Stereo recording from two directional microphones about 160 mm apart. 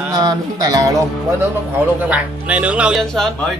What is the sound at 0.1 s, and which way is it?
Speech, 25° right (ahead or behind).